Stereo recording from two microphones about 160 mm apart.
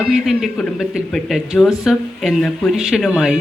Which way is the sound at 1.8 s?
Centre (ahead or behind).